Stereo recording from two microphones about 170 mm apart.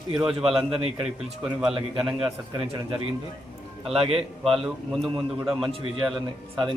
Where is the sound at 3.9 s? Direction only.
35° right (ahead or behind).